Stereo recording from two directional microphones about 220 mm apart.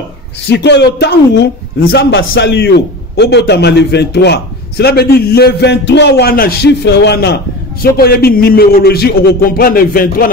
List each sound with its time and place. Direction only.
0.5 s a man's voice: 50° left (ahead or behind)